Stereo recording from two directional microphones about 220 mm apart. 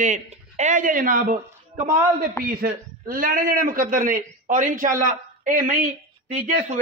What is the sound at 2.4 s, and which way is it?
Speech, 45° right (ahead or behind).